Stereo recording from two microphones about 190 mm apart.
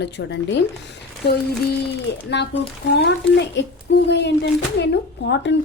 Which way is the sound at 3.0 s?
65° left (ahead or behind).